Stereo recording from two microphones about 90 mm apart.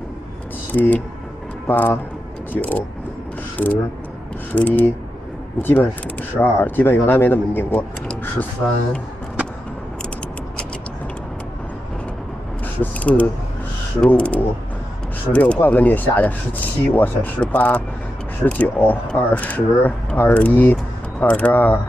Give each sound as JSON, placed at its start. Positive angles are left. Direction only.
{"t": 0.7, "sound": "speech", "side_deg": 20}
{"t": 12.8, "sound": "speech", "side_deg": 20}